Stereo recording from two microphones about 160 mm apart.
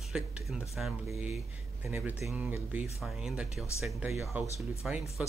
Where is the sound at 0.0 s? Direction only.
5° right (ahead or behind).